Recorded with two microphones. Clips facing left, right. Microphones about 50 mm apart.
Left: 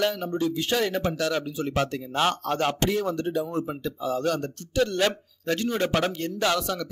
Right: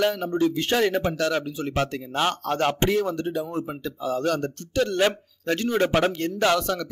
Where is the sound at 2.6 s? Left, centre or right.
Centre.